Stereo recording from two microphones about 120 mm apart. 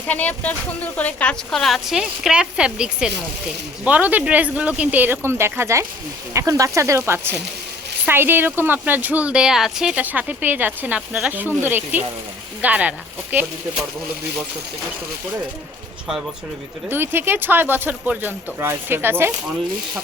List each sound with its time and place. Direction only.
0.1 s a woman's voice: 15° left (ahead or behind); by 13.5 s 15° right (ahead or behind)
16.9 s a woman's voice: 15° right (ahead or behind)